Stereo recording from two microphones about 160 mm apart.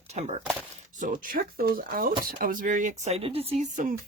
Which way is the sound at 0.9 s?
55° right (ahead or behind).